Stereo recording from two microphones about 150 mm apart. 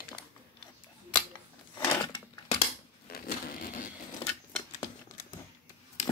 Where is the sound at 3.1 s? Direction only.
75° left (ahead or behind).